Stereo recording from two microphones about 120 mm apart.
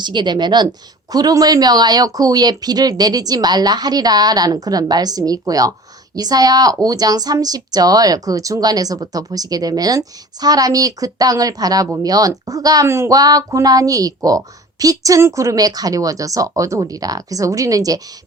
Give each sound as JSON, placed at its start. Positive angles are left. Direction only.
{"t": 0.0, "sound": "a woman's voice", "side_deg": -40}